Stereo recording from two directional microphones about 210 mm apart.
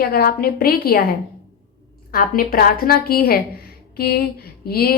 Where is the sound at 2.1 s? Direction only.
40° left (ahead or behind).